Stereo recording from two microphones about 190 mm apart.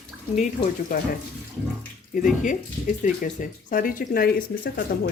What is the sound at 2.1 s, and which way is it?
Speech, 45° left (ahead or behind).